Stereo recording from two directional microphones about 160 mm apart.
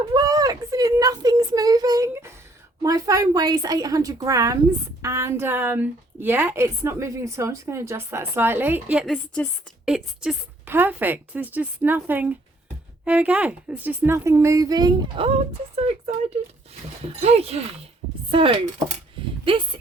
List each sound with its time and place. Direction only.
0.1 s a sound: 25° right (ahead or behind)
2.8 s a woman's voice: 20° right (ahead or behind)
9.1 s a woman's voice: 10° left (ahead or behind)
9.8 s a woman's voice: 5° right (ahead or behind); by 16.1 s 40° right (ahead or behind)
17.2 s speech: 40° right (ahead or behind)